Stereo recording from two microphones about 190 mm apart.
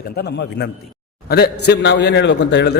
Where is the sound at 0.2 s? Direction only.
60° left (ahead or behind).